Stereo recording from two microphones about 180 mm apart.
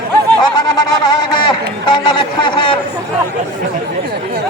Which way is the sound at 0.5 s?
20° left (ahead or behind).